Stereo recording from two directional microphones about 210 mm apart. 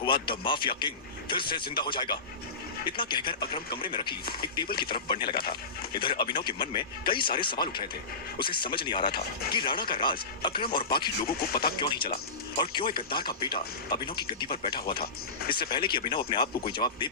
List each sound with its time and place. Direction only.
0.0 s speech: 25° left (ahead or behind)
4.4 s speech: 20° left (ahead or behind)
11.3 s speech: 45° left (ahead or behind)
11.8 s speech: 20° left (ahead or behind)
14.9 s speech: 45° left (ahead or behind)
15.5 s speech: 20° left (ahead or behind)